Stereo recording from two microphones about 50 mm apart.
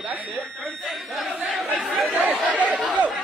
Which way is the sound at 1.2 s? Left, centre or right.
Centre.